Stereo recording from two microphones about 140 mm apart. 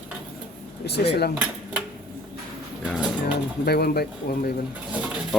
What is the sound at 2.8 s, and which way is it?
Speech, 10° right (ahead or behind).